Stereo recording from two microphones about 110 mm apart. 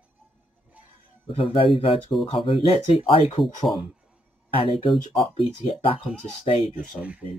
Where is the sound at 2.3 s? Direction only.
55° left (ahead or behind).